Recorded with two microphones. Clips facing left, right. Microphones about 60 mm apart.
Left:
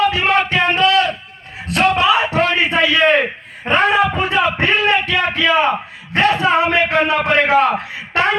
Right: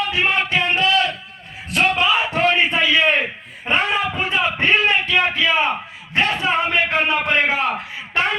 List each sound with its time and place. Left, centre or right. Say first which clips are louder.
0.1 s music: left 3 dB; left
1.7 s a sound: left 4 dB; left
6.1 s a man's voice: left 5 dB; left